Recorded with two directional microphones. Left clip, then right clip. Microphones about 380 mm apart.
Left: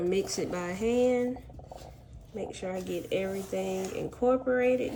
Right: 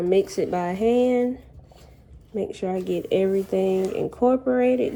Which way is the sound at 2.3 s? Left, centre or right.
Right.